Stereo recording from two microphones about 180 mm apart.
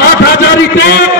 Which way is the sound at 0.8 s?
65° left (ahead or behind).